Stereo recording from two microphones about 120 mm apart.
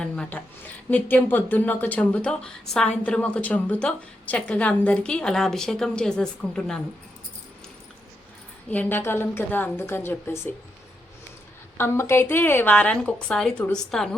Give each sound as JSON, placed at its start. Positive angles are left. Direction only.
{"t": 0.0, "sound": "a woman's voice", "side_deg": 10}
{"t": 8.7, "sound": "a woman's voice", "side_deg": 15}
{"t": 11.8, "sound": "a woman's voice", "side_deg": 20}